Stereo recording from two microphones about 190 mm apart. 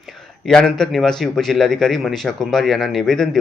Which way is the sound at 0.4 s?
Centre (ahead or behind).